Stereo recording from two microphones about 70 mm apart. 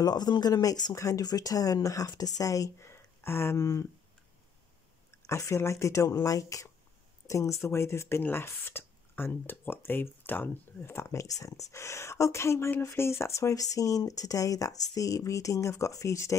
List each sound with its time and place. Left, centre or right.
0.0 s speech: left
2.9 s speech: left
5.2 s speech: left
6.0 s speech: left